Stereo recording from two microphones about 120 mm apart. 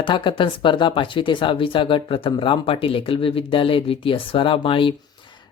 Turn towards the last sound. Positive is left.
turn(degrees=45)  # may be behind; listen again after turning